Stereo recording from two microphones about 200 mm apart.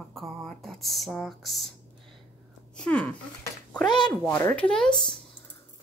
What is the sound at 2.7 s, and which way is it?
Speech, 5° left (ahead or behind).